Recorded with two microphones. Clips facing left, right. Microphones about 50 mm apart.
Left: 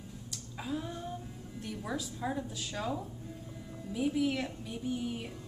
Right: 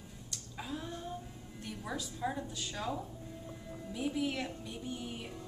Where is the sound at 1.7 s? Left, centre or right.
Centre.